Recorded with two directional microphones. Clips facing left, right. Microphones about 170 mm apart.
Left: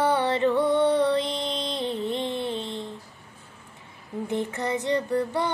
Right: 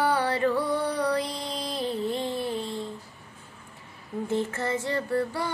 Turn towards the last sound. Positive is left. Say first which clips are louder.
# left 2 dB
turn(degrees=20)  # may be behind; listen again after turning